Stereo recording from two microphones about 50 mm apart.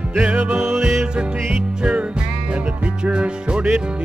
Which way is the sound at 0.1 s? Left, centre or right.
Right.